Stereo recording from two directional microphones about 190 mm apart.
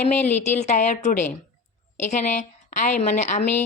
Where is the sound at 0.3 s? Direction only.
35° left (ahead or behind).